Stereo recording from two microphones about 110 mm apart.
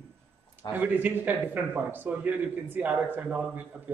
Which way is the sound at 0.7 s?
15° right (ahead or behind).